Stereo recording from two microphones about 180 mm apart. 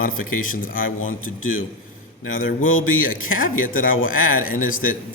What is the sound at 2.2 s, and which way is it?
Speech, 50° left (ahead or behind).